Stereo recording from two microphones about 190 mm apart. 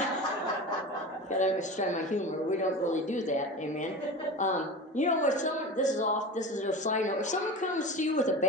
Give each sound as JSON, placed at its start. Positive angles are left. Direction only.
{"t": 1.4, "sound": "a woman's voice", "side_deg": 40}